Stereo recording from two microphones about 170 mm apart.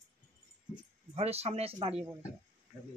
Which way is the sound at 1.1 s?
40° right (ahead or behind).